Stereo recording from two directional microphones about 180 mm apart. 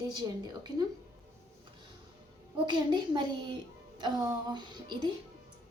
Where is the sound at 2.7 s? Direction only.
25° right (ahead or behind).